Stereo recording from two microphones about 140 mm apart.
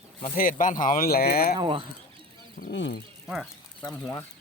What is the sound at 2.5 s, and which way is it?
Speech, 90° left.